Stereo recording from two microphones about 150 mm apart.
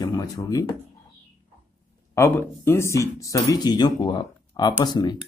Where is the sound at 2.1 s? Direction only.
15° left (ahead or behind).